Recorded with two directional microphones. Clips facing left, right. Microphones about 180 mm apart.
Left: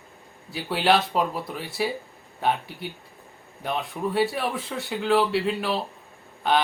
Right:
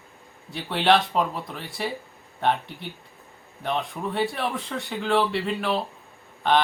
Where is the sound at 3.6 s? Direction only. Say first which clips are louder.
Even; 5° left (ahead or behind).